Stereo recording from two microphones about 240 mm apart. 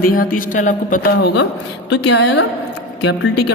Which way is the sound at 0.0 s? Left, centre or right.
Left.